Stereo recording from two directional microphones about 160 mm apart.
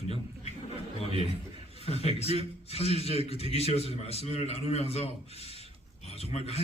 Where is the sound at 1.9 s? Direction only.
40° left (ahead or behind).